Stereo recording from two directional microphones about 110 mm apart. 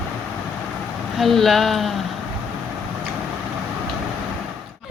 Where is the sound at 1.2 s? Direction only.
Centre (ahead or behind).